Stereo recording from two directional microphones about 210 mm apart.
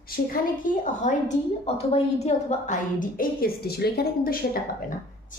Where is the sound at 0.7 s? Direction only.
40° left (ahead or behind).